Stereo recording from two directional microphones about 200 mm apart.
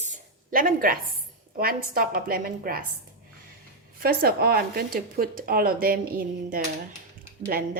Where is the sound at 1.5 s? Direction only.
45° right (ahead or behind).